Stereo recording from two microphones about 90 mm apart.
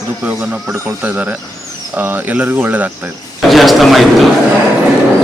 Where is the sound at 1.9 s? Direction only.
20° right (ahead or behind).